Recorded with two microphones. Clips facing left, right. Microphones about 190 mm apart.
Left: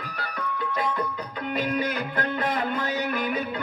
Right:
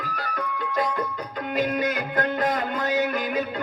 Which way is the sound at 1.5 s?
40° right (ahead or behind).